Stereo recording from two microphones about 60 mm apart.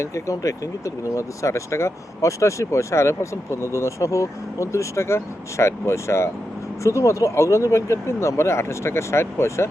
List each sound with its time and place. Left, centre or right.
0.0 s speech: left